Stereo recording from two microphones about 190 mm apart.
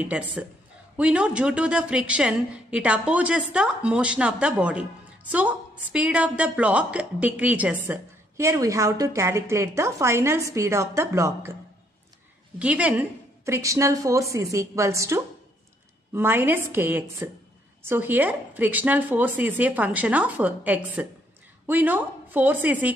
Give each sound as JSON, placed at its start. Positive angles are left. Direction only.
{"t": 0.0, "sound": "a woman's voice", "side_deg": -5}
{"t": 12.5, "sound": "a woman's voice", "side_deg": -5}